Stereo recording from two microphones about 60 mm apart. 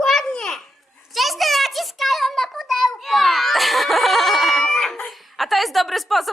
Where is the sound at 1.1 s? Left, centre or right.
Centre.